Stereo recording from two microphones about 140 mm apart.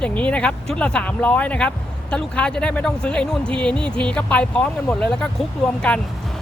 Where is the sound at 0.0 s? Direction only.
10° left (ahead or behind).